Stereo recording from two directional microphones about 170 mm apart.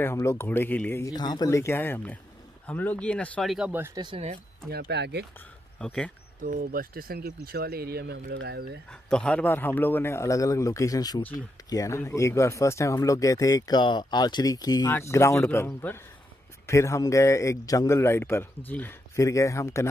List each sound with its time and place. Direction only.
0.0 s speech: 15° left (ahead or behind)
1.1 s speech: 25° left (ahead or behind); by 3.5 s 5° left (ahead or behind)
3.5 s speech: 10° right (ahead or behind)
4.6 s speech: 75° right (ahead or behind)
5.8 s speech: 5° left (ahead or behind)
6.4 s speech: 55° right (ahead or behind); by 8.8 s 80° right
9.1 s speech: 5° left (ahead or behind)